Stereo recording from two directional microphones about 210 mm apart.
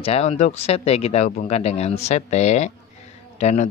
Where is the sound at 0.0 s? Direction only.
30° left (ahead or behind).